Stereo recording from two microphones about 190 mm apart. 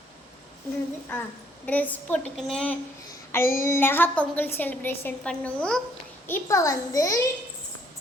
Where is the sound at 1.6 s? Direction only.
10° left (ahead or behind).